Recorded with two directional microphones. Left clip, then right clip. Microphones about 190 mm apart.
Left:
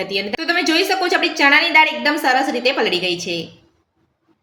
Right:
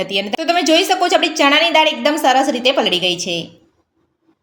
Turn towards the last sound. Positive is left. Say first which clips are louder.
# right 3 dB
turn(degrees=-45)  # may be behind; listen again after turning